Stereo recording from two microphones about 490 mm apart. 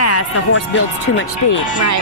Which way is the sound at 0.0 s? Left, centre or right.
Left.